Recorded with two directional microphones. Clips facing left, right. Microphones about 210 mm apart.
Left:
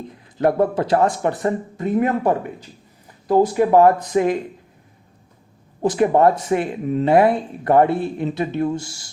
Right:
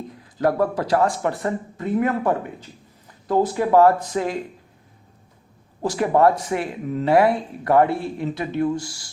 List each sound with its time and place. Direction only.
0.3 s speech: 25° left (ahead or behind)
5.8 s speech: 20° left (ahead or behind)